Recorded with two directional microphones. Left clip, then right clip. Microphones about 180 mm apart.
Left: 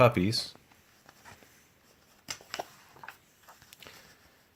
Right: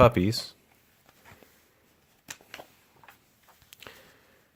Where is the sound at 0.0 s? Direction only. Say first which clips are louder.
Right 3 dB; 40° right (ahead or behind).